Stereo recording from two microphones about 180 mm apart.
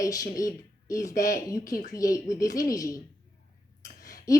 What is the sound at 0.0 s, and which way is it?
A woman's voice, 20° left (ahead or behind).